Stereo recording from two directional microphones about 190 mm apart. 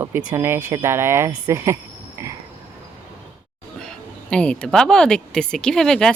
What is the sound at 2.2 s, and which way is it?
Frog, 15° right (ahead or behind).